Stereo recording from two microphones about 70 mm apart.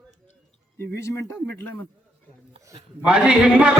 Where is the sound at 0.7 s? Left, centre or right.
Left.